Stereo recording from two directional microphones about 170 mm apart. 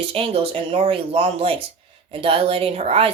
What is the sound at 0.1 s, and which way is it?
Speech, 35° right (ahead or behind).